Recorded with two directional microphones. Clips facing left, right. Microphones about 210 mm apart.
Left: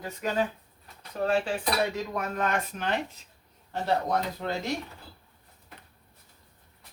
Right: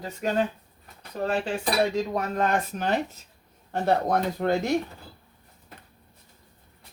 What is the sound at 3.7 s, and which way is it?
Speech, 50° right (ahead or behind).